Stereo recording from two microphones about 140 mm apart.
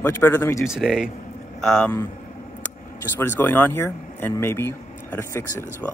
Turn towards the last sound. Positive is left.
turn(degrees=15)  # may be behind; listen again after turning